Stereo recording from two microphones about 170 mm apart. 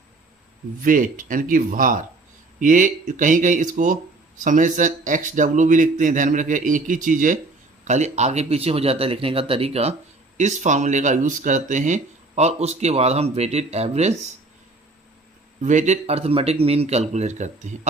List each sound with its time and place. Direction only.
0.8 s speech: 50° right (ahead or behind)
15.6 s speech: 45° right (ahead or behind)